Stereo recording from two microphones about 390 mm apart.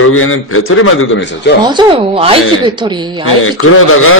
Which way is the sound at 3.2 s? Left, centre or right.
Left.